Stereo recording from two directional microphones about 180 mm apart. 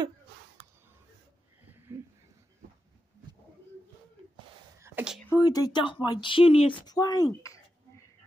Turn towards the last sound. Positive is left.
turn(degrees=20)  # may be behind; listen again after turning